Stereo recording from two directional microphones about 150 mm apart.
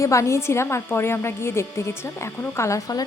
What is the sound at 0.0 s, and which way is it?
A woman's voice, 20° left (ahead or behind).